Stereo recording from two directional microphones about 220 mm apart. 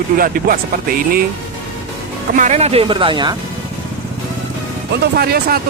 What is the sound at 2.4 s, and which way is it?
Speech, 30° right (ahead or behind).